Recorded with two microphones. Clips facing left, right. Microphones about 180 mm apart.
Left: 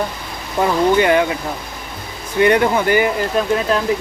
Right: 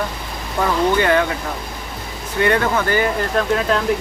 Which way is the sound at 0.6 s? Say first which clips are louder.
Left 3 dB; 15° left (ahead or behind).